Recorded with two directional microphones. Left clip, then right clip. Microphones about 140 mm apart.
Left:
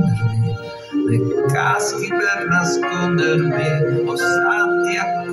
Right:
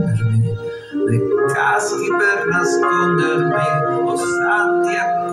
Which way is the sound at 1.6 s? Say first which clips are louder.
Right 2 dB; 20° right (ahead or behind).